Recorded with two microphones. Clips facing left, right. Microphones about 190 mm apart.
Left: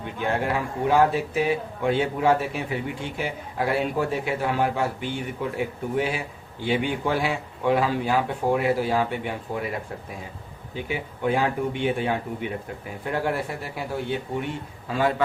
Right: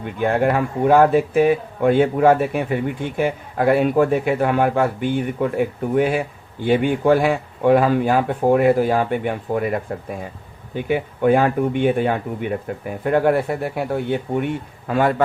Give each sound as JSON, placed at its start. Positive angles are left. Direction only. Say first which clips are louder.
{"t": 0.2, "sound": "speech", "louder": "right 7 dB", "side_deg": -55}